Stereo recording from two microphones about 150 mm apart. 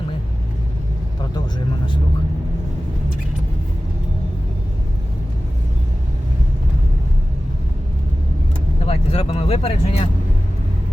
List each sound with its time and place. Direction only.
8.8 s vehicle: 40° left (ahead or behind)